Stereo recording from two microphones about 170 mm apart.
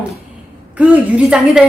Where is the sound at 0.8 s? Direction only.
5° right (ahead or behind).